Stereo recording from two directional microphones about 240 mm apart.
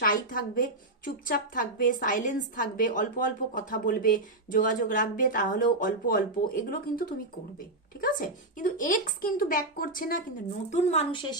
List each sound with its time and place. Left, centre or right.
0.0 s a woman's voice: left